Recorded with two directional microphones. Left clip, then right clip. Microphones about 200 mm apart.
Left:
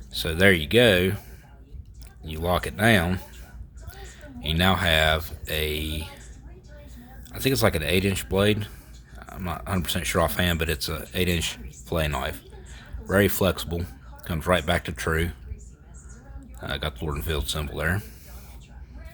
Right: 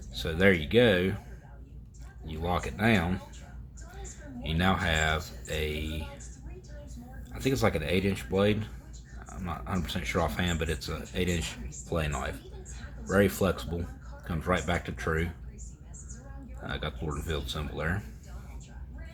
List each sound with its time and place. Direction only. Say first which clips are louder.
0.1 s speech: left 5 dB; 45° left (ahead or behind)
2.2 s speech: left 6 dB; 50° left (ahead or behind)
7.3 s speech: left 5 dB; 45° left (ahead or behind)
16.6 s speech: left 6 dB; 50° left (ahead or behind)